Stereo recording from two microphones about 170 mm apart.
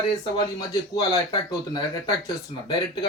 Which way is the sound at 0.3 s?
20° left (ahead or behind).